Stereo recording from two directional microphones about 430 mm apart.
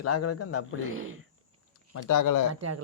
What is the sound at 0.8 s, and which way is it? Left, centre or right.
Speech, right.